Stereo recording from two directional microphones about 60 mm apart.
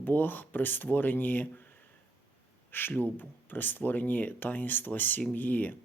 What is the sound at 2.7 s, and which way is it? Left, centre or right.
Speech, left.